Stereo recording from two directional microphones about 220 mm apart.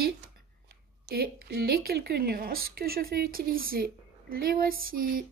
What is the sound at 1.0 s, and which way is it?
A woman's voice, 45° right (ahead or behind).